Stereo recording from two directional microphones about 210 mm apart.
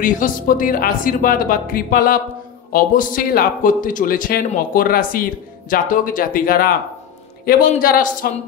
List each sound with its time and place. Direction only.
0.0 s speech: 40° left (ahead or behind)